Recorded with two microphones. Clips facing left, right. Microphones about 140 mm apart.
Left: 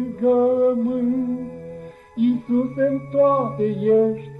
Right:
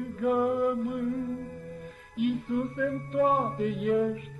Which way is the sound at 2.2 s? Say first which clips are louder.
Left 9 dB; 45° left (ahead or behind).